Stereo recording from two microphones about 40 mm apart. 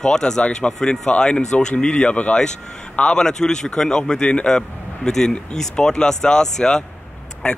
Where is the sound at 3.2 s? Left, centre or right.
Centre.